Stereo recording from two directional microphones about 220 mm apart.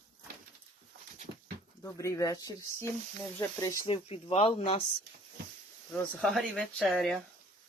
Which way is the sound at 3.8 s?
25° left (ahead or behind).